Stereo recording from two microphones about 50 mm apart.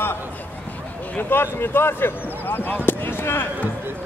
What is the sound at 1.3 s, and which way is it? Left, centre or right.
Speech, left.